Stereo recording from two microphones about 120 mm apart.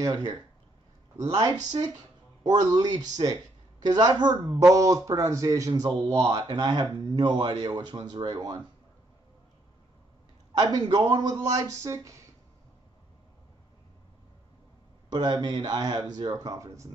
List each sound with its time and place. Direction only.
0.0 s speech: 30° right (ahead or behind)
6.4 s speech: 40° right (ahead or behind)
10.6 s speech: 30° right (ahead or behind)
15.0 s speech: 40° right (ahead or behind)